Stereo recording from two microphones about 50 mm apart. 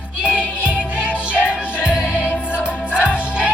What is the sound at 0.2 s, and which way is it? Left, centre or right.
Music, right.